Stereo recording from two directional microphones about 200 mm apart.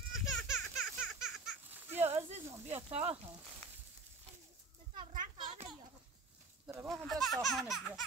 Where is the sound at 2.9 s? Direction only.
30° right (ahead or behind).